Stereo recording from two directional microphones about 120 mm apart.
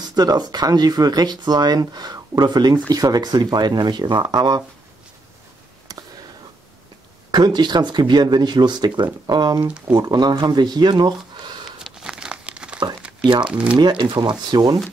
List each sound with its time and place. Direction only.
0.1 s speech: 35° right (ahead or behind)
5.9 s a sound: 30° right (ahead or behind)
7.2 s speech: 35° right (ahead or behind)
11.8 s crumpling: 5° right (ahead or behind)
13.2 s speech: 40° right (ahead or behind)
13.5 s speech: 10° right (ahead or behind)
13.7 s speech: 40° right (ahead or behind)